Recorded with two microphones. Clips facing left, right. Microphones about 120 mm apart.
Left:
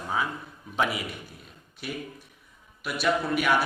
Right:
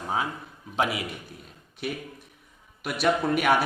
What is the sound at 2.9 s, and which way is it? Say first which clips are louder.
Speech: right 2 dB; 55° right (ahead or behind).